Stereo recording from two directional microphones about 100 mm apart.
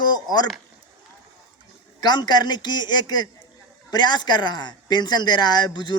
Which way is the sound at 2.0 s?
45° left (ahead or behind).